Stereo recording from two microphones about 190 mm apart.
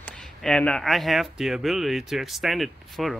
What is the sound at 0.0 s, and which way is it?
Speech, 5° left (ahead or behind).